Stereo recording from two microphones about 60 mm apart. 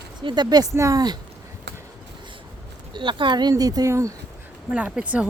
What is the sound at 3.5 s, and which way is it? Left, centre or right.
Speech, right.